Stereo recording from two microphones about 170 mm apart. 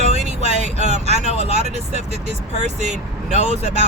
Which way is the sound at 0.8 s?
40° right (ahead or behind).